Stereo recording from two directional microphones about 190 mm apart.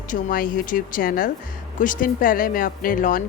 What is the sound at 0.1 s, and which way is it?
Speech, 45° left (ahead or behind).